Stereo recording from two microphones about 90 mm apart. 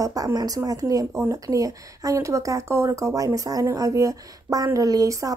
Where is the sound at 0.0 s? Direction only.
45° right (ahead or behind).